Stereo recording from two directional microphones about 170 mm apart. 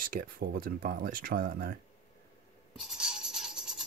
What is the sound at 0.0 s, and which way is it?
Speech, 55° right (ahead or behind).